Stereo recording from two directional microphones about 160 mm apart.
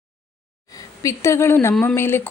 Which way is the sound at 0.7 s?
20° left (ahead or behind).